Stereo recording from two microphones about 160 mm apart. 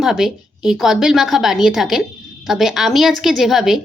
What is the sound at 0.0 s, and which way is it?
Speech, centre (ahead or behind).